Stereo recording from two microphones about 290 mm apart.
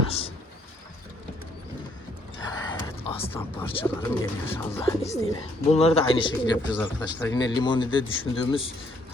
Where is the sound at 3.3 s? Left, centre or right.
Centre.